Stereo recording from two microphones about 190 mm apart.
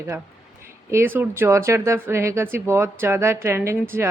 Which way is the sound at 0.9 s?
10° right (ahead or behind).